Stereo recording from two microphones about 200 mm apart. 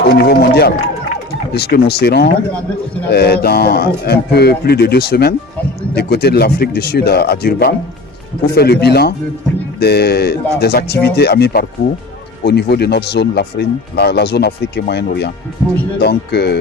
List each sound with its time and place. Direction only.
0.1 s a man's voice: 55° left (ahead or behind)